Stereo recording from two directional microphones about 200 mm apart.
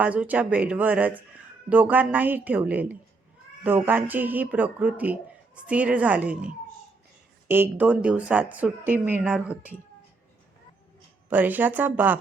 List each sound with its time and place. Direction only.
0.0 s a woman's voice: 5° right (ahead or behind)
11.3 s a woman's voice: 10° right (ahead or behind)